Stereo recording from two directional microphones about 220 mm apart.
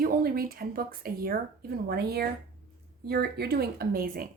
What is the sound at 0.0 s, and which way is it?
Speech, 40° right (ahead or behind).